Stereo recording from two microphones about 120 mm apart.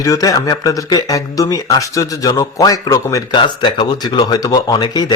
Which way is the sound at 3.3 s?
40° left (ahead or behind).